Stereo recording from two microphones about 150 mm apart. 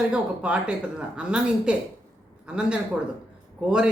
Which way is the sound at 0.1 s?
5° right (ahead or behind).